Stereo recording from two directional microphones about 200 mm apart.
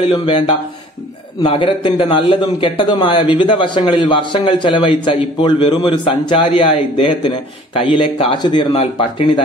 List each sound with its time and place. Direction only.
0.0 s a man's voice: 25° left (ahead or behind)